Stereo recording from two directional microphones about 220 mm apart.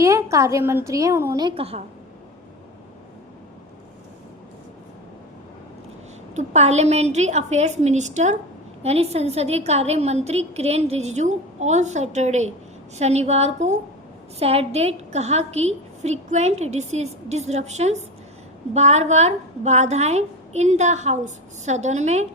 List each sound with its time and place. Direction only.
0.0 s a woman's voice: 15° right (ahead or behind)
6.3 s a woman's voice: 30° right (ahead or behind)